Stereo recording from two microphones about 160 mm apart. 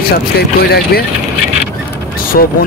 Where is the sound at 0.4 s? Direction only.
75° left (ahead or behind).